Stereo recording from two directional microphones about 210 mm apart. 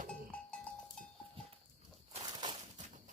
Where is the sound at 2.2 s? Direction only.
20° right (ahead or behind).